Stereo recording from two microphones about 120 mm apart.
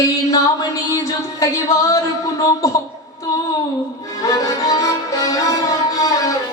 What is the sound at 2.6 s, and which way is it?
Speech, 30° left (ahead or behind).